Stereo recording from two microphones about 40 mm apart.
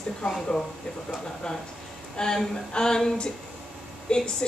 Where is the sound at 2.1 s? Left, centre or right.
Centre.